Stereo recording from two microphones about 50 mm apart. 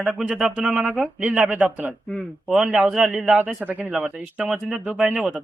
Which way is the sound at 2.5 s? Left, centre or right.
Centre.